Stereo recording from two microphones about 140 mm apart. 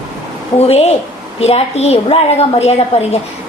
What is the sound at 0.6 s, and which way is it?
A woman's voice, 50° left (ahead or behind).